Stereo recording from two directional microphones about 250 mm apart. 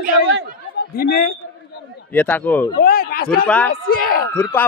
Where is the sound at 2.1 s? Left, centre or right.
Centre.